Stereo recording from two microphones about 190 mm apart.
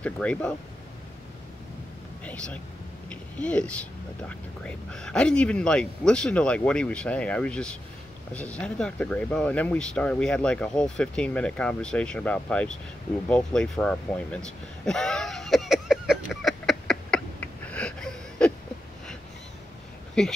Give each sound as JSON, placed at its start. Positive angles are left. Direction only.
{"t": 0.0, "sound": "speech", "side_deg": 5}
{"t": 2.2, "sound": "speech", "side_deg": 5}
{"t": 13.3, "sound": "a sound", "side_deg": 5}
{"t": 20.2, "sound": "speech", "side_deg": 0}